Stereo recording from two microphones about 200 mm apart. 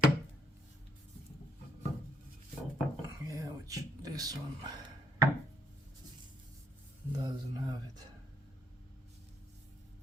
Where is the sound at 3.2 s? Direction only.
15° right (ahead or behind).